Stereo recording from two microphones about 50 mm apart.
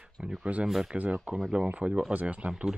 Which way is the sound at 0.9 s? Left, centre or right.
Right.